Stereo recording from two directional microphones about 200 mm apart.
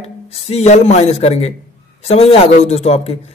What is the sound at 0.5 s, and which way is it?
A man's voice, 35° left (ahead or behind).